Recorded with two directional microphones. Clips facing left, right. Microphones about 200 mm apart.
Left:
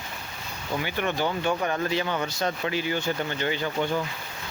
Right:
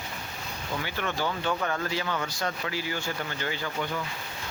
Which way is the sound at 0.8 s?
20° left (ahead or behind).